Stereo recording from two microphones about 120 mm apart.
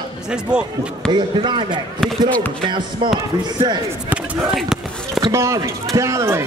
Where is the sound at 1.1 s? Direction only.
40° right (ahead or behind).